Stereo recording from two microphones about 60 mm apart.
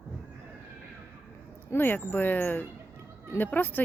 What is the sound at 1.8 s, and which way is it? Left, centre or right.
Speech, left.